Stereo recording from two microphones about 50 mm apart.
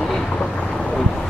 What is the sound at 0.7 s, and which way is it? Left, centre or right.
Boat, centre.